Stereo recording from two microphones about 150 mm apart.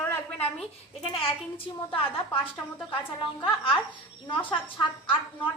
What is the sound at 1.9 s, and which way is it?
Speech, 35° left (ahead or behind).